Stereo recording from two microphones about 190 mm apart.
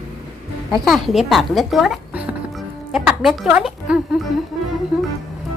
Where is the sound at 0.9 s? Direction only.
Centre (ahead or behind).